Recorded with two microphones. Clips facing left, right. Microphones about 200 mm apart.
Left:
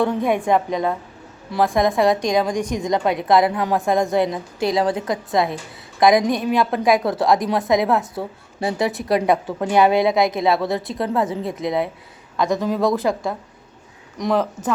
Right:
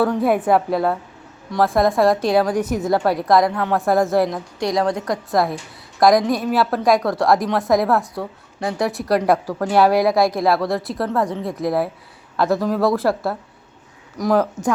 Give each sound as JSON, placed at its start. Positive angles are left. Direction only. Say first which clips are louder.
{"t": 0.0, "sound": "a woman's voice", "louder": "right 2 dB", "side_deg": -5}
{"t": 3.5, "sound": "a woman's voice", "louder": "even", "side_deg": 15}
{"t": 3.8, "sound": "a woman's voice", "louder": "right 2 dB", "side_deg": 0}
{"t": 9.8, "sound": "speech", "louder": "right 1 dB", "side_deg": 20}
{"t": 10.5, "sound": "a woman's voice", "louder": "right 1 dB", "side_deg": 0}